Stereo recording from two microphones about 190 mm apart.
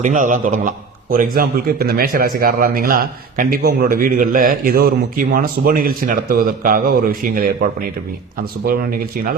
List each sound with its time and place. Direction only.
0.0 s a man's voice: 40° right (ahead or behind)
8.6 s a man's voice: 50° right (ahead or behind)